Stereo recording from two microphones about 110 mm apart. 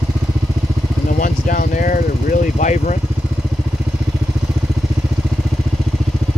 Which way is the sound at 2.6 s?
90° left.